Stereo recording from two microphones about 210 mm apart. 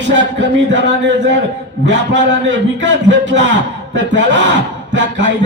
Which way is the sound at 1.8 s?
55° right (ahead or behind).